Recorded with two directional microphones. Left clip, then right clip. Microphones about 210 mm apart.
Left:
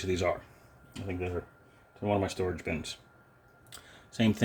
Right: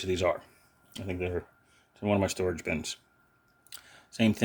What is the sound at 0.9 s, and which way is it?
Speech, 35° right (ahead or behind).